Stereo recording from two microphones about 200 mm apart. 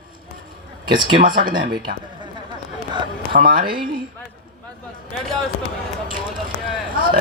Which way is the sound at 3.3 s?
45° right (ahead or behind).